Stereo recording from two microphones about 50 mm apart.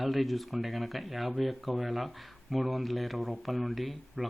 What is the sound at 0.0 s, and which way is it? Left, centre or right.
Speech, centre.